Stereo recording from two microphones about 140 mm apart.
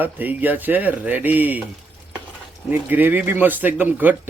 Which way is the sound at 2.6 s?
15° right (ahead or behind).